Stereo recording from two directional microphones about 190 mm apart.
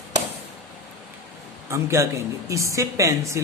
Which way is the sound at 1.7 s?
15° right (ahead or behind).